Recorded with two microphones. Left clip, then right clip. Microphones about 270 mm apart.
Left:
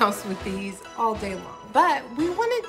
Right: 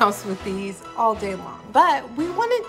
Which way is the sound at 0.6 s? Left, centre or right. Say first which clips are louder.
Right 4 dB; centre.